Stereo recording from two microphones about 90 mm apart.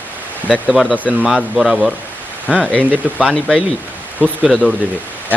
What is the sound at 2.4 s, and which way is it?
Speech, 15° left (ahead or behind).